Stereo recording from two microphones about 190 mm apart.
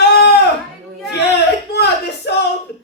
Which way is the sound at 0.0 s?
60° left (ahead or behind).